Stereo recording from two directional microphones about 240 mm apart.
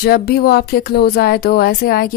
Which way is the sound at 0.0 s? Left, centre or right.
Left.